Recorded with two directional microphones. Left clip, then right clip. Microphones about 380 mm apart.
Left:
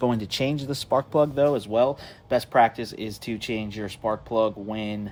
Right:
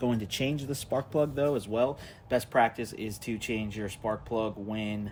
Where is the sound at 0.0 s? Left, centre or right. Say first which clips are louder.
Left 6 dB; centre.